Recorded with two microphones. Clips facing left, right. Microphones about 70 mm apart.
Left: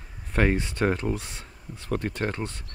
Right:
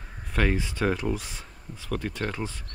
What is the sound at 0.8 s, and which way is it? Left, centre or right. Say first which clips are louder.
Speech: left 1 dB; left.